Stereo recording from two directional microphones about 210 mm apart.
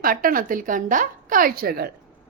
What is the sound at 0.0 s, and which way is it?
A woman's voice, 45° right (ahead or behind).